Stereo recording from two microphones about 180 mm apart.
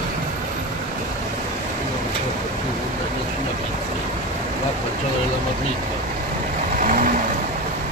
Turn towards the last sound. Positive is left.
turn(degrees=-45)  # may be behind; listen again after turning